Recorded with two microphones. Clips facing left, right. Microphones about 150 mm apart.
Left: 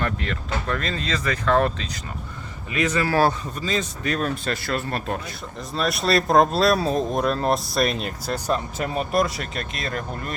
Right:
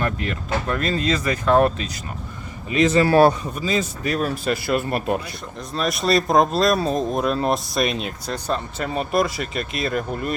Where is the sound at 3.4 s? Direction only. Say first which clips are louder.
Right 3 dB; 10° right (ahead or behind).